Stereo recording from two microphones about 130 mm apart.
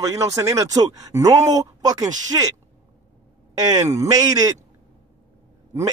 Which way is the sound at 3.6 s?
25° right (ahead or behind).